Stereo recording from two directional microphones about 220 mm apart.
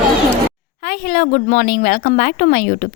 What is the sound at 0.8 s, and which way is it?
A woman's voice, 40° left (ahead or behind).